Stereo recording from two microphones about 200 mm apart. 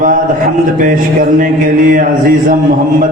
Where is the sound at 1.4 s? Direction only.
45° right (ahead or behind).